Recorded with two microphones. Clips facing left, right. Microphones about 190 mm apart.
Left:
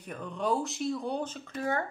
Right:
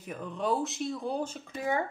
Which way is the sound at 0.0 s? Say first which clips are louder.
Even; 5° right (ahead or behind).